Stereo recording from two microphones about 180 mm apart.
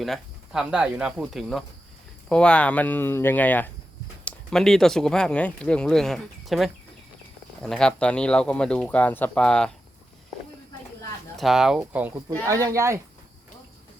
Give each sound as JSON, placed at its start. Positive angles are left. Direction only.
{"t": 0.0, "sound": "speech", "side_deg": 0}
{"t": 11.3, "sound": "speech", "side_deg": 0}
{"t": 12.5, "sound": "speech", "side_deg": -20}